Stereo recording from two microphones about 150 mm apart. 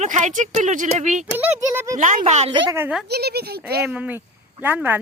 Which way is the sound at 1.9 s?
55° right (ahead or behind).